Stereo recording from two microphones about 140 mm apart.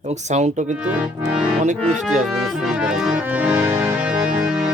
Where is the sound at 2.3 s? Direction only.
Centre (ahead or behind).